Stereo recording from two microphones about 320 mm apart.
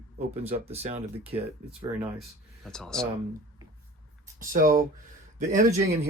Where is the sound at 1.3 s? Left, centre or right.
Centre.